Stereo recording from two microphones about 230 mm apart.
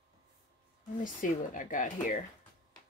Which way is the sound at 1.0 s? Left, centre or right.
Left.